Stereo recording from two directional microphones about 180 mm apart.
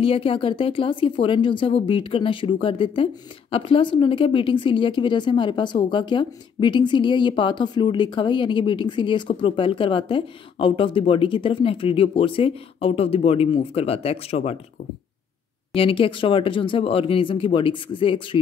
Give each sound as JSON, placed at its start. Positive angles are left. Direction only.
{"t": 0.0, "sound": "speech", "side_deg": 30}
{"t": 15.7, "sound": "speech", "side_deg": 30}